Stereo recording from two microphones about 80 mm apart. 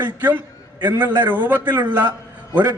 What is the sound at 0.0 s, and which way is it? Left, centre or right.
A man's voice, right.